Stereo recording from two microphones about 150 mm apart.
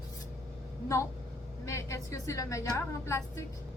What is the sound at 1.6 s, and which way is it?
A woman's voice, 20° left (ahead or behind).